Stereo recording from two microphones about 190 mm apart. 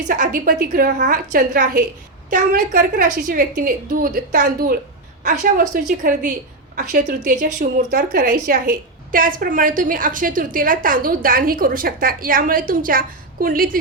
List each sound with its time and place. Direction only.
0.1 s a woman's voice: 45° right (ahead or behind)
7.9 s a woman's voice: 55° right (ahead or behind)